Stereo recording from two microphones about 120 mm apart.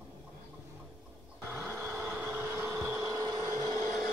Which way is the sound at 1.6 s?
20° right (ahead or behind).